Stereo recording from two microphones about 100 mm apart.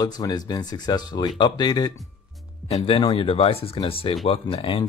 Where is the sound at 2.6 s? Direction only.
75° left (ahead or behind).